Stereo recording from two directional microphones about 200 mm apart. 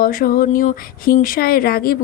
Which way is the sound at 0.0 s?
45° left (ahead or behind).